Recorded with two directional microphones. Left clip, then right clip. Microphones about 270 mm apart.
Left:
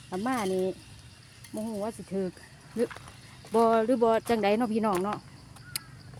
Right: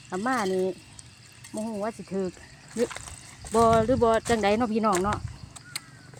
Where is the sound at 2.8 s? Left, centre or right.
Right.